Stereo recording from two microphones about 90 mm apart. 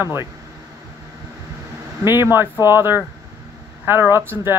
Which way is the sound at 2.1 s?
25° right (ahead or behind).